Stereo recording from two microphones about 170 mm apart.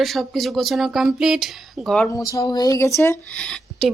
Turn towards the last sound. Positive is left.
turn(degrees=0)  # may be behind; listen again after turning